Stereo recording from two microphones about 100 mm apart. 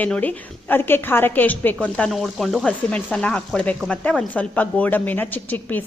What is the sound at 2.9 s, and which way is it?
A woman's voice, 15° left (ahead or behind).